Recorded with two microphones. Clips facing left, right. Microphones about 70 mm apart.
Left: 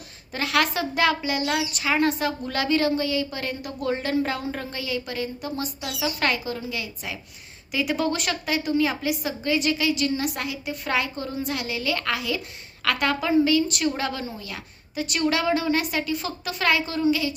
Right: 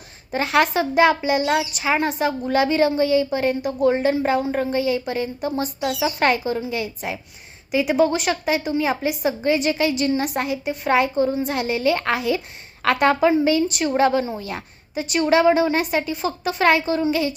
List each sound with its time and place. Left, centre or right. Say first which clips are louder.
0.3 s a woman's voice: right 5 dB; right
15.0 s a woman's voice: right 7 dB; right